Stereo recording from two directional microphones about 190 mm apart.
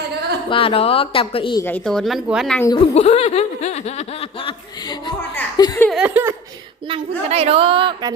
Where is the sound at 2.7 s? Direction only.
35° left (ahead or behind).